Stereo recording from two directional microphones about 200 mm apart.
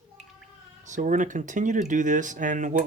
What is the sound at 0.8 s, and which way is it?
Speech, 40° right (ahead or behind).